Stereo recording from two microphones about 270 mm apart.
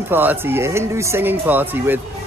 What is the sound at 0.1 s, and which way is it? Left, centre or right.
Speech, centre.